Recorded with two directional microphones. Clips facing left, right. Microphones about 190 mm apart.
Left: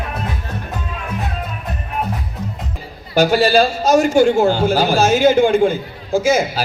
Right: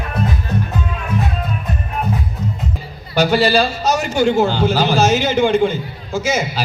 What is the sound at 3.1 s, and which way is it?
A man's voice, 50° left (ahead or behind).